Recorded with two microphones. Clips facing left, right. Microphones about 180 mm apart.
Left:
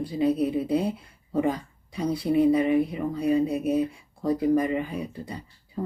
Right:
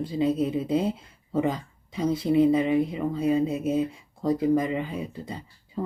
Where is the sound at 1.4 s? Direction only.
20° right (ahead or behind).